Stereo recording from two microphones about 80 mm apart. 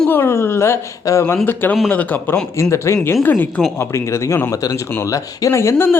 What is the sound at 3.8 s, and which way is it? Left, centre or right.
Speech, left.